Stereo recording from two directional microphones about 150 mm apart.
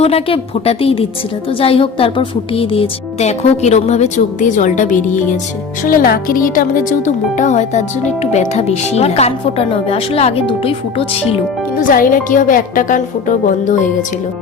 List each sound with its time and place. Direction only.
0.0 s a woman's voice: 40° left (ahead or behind); by 5.2 s 55° left (ahead or behind)
5.8 s a woman's voice: 75° left (ahead or behind); by 11.3 s 40° left (ahead or behind)
11.8 s a woman's voice: 65° left (ahead or behind)